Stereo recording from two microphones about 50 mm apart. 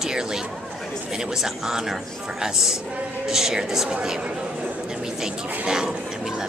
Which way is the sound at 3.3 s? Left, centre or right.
Centre.